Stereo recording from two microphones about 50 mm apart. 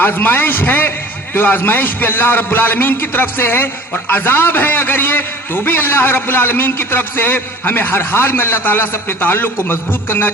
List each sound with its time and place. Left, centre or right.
0.0 s a man's voice: left